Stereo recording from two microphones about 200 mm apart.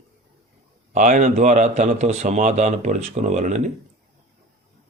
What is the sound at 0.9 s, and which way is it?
A man's voice, 40° right (ahead or behind).